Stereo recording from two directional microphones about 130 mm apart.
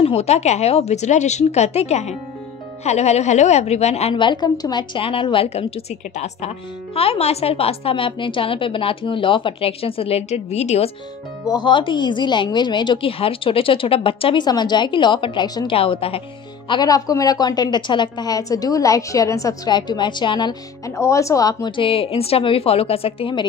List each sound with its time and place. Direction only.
0.0 s a woman's voice: 50° left (ahead or behind)
4.1 s a woman's voice: 35° left (ahead or behind); by 10.9 s 60° left (ahead or behind)
11.4 s speech: 35° left (ahead or behind)
15.7 s a woman's voice: 45° left (ahead or behind)
16.6 s speech: 30° left (ahead or behind)
20.9 s a woman's voice: 25° left (ahead or behind); by 23.4 s 45° left (ahead or behind)